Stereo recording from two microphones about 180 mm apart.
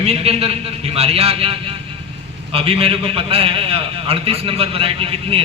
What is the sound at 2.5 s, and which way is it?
A man's voice, 30° right (ahead or behind).